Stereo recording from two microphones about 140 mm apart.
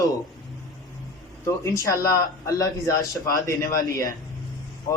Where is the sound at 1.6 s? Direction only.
25° left (ahead or behind).